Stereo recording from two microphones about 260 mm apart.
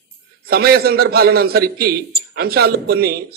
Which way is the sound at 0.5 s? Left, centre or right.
Right.